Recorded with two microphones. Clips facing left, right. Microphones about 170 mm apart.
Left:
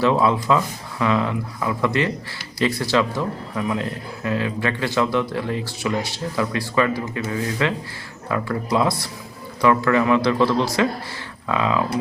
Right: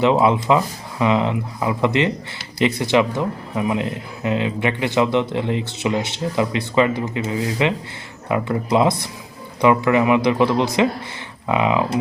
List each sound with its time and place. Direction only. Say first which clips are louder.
0.0 s a man's voice: right 2 dB; 20° right (ahead or behind)